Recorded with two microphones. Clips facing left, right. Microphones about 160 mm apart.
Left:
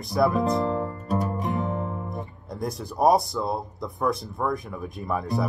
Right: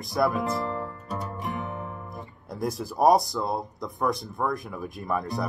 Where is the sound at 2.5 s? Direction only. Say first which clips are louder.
Right 1 dB; centre (ahead or behind).